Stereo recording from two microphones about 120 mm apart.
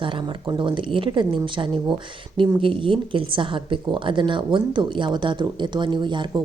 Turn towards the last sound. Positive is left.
turn(degrees=-40)  # may be behind; listen again after turning